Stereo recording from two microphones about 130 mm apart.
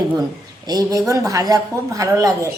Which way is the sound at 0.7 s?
25° right (ahead or behind).